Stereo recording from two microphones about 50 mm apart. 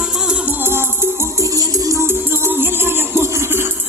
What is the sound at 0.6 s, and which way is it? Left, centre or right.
Music, right.